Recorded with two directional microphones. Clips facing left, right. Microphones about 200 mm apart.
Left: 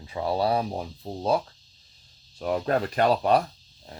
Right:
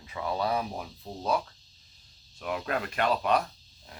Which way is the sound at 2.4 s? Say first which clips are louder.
Left 7 dB; 35° left (ahead or behind).